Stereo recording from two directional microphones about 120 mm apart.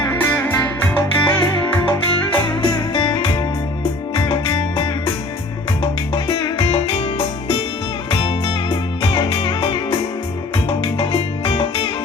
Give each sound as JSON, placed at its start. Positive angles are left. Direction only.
{"t": 0.2, "sound": "music", "side_deg": 15}
{"t": 1.8, "sound": "music", "side_deg": 45}
{"t": 6.1, "sound": "music", "side_deg": 45}
{"t": 8.1, "sound": "music", "side_deg": 45}
{"t": 10.9, "sound": "music", "side_deg": 45}